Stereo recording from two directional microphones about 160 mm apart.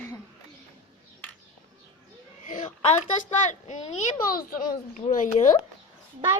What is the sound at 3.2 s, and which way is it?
Speech, 50° left (ahead or behind).